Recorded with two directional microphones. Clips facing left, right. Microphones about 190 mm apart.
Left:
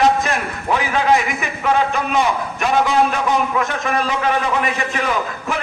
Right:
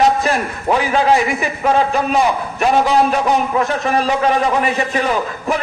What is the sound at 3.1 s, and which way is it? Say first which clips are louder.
A man's voice: right 3 dB; 35° right (ahead or behind).